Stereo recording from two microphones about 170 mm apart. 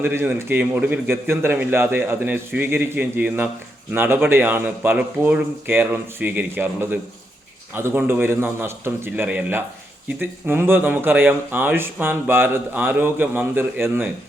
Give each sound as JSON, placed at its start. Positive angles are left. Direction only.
{"t": 0.0, "sound": "speech", "side_deg": -15}